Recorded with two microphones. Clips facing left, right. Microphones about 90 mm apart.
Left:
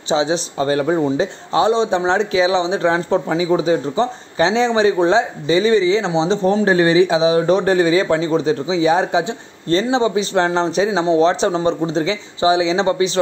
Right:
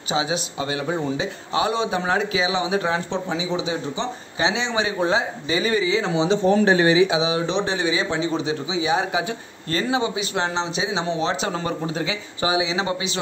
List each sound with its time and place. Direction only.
0.1 s speech: 35° left (ahead or behind)
0.9 s speech: 35° left (ahead or behind)